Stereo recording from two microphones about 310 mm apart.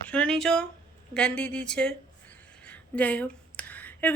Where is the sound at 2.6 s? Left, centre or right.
Centre.